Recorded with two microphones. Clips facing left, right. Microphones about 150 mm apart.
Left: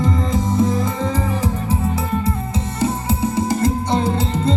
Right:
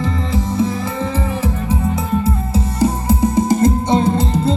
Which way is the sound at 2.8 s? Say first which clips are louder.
Right 4 dB; 10° right (ahead or behind).